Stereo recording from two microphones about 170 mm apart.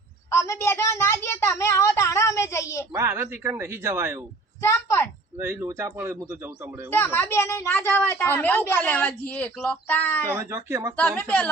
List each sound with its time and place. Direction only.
0.3 s a sound: 15° left (ahead or behind)
2.9 s speech: 15° right (ahead or behind)
4.6 s a woman's voice: 15° left (ahead or behind)
5.4 s speech: 15° right (ahead or behind)
6.9 s a woman's voice: 15° left (ahead or behind)
10.3 s speech: 15° right (ahead or behind)
10.9 s a woman's voice: 10° left (ahead or behind)